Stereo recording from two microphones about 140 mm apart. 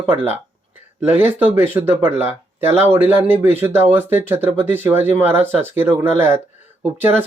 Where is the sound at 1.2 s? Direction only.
15° right (ahead or behind).